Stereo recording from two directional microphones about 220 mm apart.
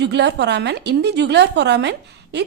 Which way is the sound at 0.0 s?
50° right (ahead or behind).